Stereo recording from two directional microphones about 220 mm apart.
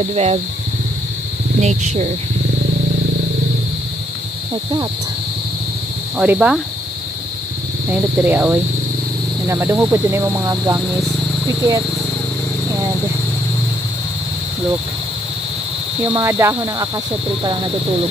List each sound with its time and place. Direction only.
0.1 s speech: 30° right (ahead or behind)
1.6 s speech: 30° right (ahead or behind)
6.1 s speech: 5° right (ahead or behind)
8.2 s speech: 10° right (ahead or behind)
16.1 s speech: 10° right (ahead or behind)